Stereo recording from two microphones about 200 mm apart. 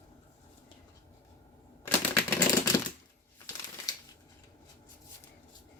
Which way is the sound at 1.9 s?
10° left (ahead or behind).